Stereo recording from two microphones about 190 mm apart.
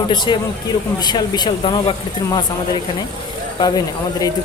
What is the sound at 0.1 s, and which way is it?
A woman's voice, 25° left (ahead or behind).